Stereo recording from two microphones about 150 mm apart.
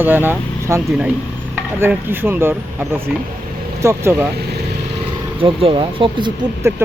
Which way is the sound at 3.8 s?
20° right (ahead or behind).